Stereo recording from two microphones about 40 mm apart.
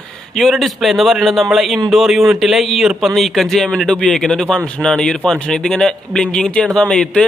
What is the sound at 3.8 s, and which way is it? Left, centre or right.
A man's voice, left.